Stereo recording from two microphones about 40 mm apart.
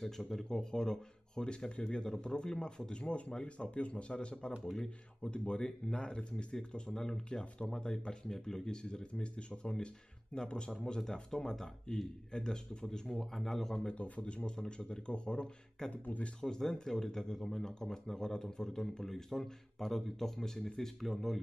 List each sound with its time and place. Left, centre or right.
0.0 s speech: centre
2.9 s speech: left
8.8 s speech: left
13.8 s a man's voice: left
14.4 s speech: left
15.9 s a man's voice: left
16.3 s speech: centre